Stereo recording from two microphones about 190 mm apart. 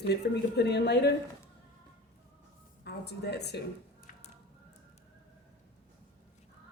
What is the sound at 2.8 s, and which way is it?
Speech, 60° left (ahead or behind).